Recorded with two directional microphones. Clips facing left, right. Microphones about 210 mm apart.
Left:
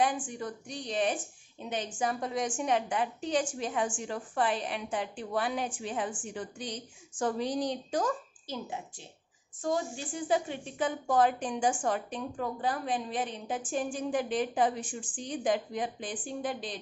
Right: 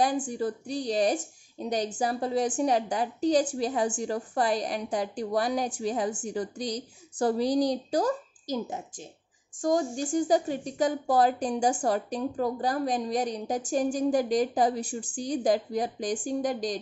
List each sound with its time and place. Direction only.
0.0 s a woman's voice: 35° right (ahead or behind)